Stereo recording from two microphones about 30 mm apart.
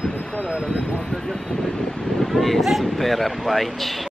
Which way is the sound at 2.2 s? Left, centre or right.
Centre.